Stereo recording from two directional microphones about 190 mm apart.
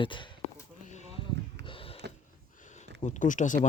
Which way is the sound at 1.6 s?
30° left (ahead or behind).